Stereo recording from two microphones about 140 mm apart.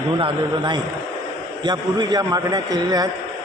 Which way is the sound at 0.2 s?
35° right (ahead or behind).